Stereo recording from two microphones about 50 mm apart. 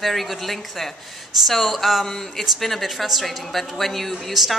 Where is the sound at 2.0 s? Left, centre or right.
Centre.